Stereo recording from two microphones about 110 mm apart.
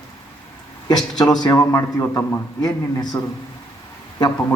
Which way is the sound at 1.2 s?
40° left (ahead or behind).